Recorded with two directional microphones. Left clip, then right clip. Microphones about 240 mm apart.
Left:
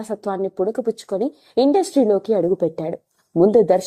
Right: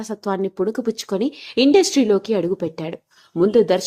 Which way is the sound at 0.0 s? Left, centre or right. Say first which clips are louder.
Even; centre.